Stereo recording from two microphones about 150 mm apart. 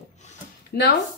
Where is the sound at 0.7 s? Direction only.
90° left.